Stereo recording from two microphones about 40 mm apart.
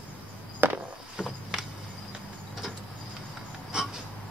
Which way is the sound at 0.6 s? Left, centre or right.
Right.